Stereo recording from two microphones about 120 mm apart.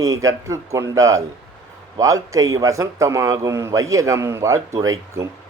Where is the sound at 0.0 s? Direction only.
25° right (ahead or behind).